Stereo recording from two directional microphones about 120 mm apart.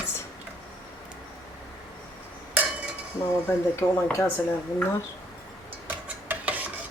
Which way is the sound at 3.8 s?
20° left (ahead or behind).